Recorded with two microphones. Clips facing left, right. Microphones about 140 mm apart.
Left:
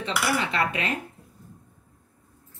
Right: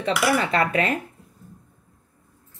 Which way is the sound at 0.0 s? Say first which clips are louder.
Right 5 dB; 45° right (ahead or behind).